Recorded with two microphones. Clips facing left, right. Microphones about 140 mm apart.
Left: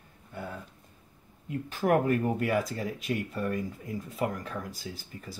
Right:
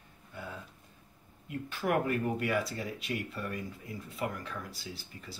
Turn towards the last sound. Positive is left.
turn(degrees=45)  # may be behind; listen again after turning